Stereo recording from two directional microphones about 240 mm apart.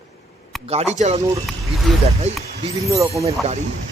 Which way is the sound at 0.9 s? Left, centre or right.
Right.